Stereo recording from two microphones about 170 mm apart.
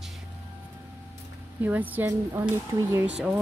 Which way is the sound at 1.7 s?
10° right (ahead or behind).